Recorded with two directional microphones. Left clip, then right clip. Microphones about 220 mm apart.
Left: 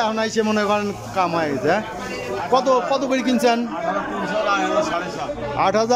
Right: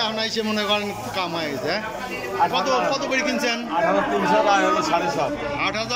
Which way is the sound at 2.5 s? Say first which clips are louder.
Left 4 dB; 20° left (ahead or behind).